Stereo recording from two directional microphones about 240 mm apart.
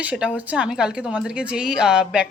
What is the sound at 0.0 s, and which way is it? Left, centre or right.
Speech, centre.